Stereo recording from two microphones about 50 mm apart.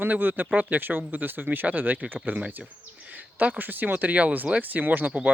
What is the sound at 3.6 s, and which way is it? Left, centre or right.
Speech, right.